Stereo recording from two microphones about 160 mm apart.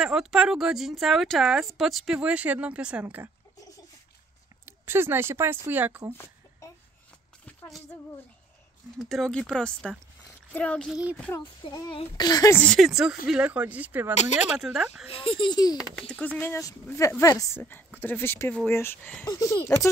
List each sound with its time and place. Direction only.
0.0 s speech: 5° right (ahead or behind)
4.6 s speech: 15° right (ahead or behind)
8.9 s speech: centre (ahead or behind)
11.3 s speech: 25° left (ahead or behind)
12.5 s speech: centre (ahead or behind)
14.1 s speech: 45° left (ahead or behind)
14.6 s speech: 5° right (ahead or behind)
15.0 s speech: 35° left (ahead or behind)
15.8 s speech: 5° left (ahead or behind)
16.3 s speech: 15° left (ahead or behind)